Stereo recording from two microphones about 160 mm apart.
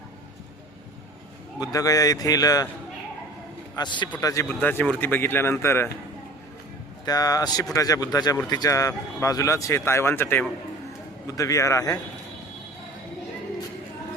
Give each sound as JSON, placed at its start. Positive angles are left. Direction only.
{"t": 1.5, "sound": "speech", "side_deg": 20}
{"t": 3.8, "sound": "speech", "side_deg": 30}
{"t": 4.4, "sound": "speech", "side_deg": 10}
{"t": 7.0, "sound": "speech", "side_deg": 25}